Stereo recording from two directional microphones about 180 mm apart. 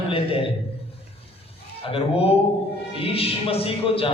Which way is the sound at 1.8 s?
30° left (ahead or behind).